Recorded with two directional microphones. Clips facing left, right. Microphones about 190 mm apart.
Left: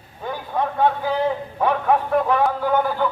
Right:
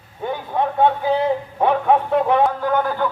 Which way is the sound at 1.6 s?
25° right (ahead or behind).